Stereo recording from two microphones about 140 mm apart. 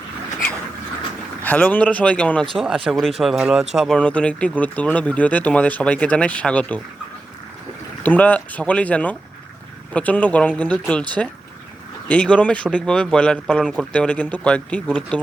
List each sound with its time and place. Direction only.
1.4 s speech: 10° left (ahead or behind)
2.6 s speech: 5° right (ahead or behind)
8.0 s speech: 10° left (ahead or behind)
12.0 s speech: 10° left (ahead or behind)